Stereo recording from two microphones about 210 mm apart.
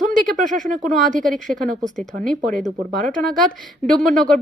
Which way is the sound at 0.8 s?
40° right (ahead or behind).